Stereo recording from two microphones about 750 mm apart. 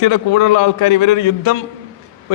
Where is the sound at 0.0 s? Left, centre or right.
Left.